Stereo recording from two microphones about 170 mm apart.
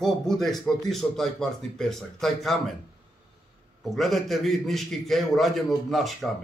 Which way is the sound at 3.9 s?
Centre (ahead or behind).